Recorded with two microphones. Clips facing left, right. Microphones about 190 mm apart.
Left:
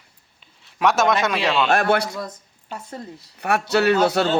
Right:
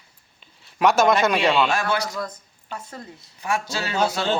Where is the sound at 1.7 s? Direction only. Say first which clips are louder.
Left 5 dB; 60° left (ahead or behind).